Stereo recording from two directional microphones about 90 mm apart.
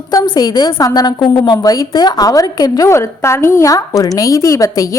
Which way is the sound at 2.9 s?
30° left (ahead or behind).